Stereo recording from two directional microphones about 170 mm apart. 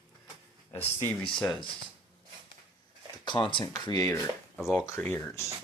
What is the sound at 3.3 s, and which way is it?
Speech, 30° left (ahead or behind).